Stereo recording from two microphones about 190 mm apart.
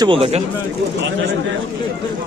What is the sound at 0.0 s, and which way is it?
Speech, 30° right (ahead or behind).